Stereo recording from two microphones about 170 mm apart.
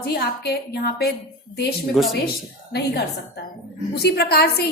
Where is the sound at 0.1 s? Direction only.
70° left (ahead or behind).